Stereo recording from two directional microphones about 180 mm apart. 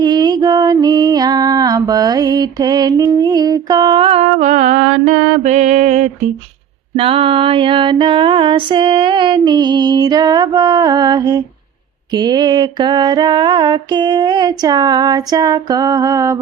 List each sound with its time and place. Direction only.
0.0 s female singing: 20° right (ahead or behind); by 6.1 s 40° right (ahead or behind)
6.9 s music: 30° right (ahead or behind)